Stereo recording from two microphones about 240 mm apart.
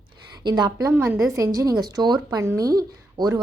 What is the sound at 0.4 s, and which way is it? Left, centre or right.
Speech, centre.